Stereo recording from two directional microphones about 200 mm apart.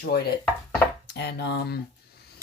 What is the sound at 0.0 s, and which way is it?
Speech, 55° left (ahead or behind).